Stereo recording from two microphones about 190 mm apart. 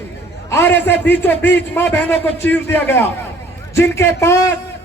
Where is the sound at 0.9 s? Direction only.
10° left (ahead or behind).